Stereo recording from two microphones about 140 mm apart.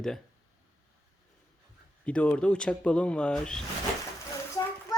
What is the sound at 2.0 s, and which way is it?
Speech, 10° left (ahead or behind).